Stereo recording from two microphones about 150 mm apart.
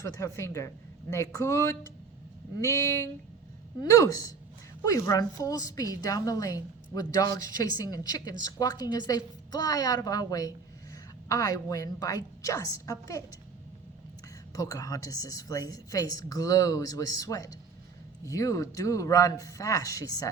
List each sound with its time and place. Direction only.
0.0 s a woman's voice: 20° left (ahead or behind)
14.5 s a woman's voice: 25° left (ahead or behind)